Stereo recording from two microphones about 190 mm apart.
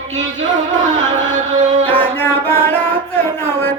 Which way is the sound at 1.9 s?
10° left (ahead or behind).